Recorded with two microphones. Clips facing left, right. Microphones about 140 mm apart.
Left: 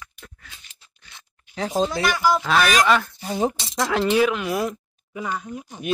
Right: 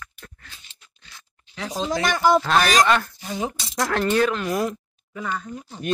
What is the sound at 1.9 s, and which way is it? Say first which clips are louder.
Speech: right 2 dB; 45° right (ahead or behind).